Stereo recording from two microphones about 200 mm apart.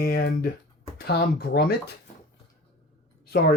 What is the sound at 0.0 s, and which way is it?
Speech, 50° left (ahead or behind).